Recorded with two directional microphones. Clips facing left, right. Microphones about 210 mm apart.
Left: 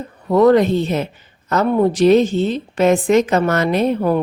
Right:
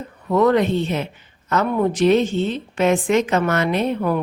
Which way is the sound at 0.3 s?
35° left (ahead or behind).